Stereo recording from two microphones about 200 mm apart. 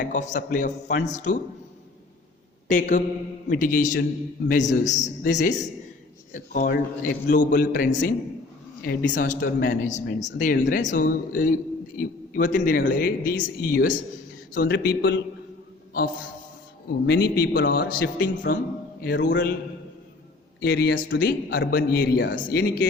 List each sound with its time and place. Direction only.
0.0 s a man's voice: 40° left (ahead or behind)
2.6 s a man's voice: 40° left (ahead or behind); by 15.2 s 55° left (ahead or behind)
17.1 s speech: 55° left (ahead or behind)
19.0 s speech: 55° left (ahead or behind)
20.6 s speech: 55° left (ahead or behind)